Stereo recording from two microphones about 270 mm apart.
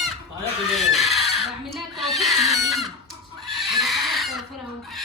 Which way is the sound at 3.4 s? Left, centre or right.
Centre.